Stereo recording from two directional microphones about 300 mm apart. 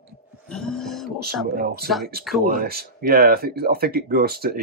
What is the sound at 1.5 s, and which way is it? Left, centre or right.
Speech, right.